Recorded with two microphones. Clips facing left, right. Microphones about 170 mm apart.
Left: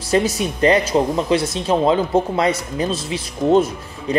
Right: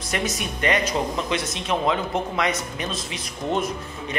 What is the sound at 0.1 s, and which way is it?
Speech, 30° left (ahead or behind).